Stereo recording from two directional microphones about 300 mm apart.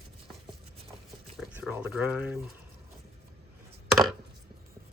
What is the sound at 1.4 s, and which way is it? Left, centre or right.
Speech, centre.